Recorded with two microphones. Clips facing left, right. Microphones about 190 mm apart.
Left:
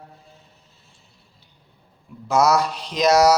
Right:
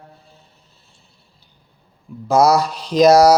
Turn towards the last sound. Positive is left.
turn(degrees=-35)  # may be behind; listen again after turning